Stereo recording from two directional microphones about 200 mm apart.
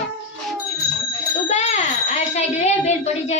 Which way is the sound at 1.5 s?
35° left (ahead or behind).